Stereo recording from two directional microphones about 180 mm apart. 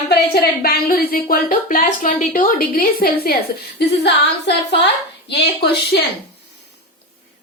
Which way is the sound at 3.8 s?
70° left (ahead or behind).